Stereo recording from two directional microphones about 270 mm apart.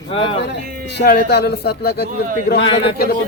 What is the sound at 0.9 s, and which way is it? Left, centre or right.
A man's voice, left.